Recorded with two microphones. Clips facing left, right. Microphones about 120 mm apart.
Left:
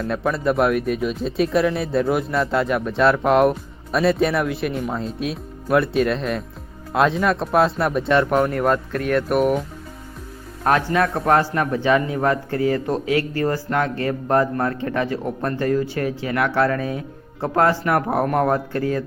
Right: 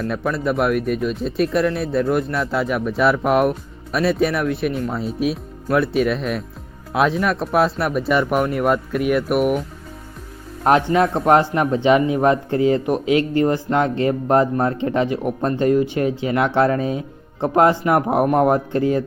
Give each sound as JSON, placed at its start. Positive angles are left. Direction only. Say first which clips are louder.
{"t": 0.0, "sound": "speech", "louder": "even", "side_deg": 0}
{"t": 10.6, "sound": "speech", "louder": "right 3 dB", "side_deg": -20}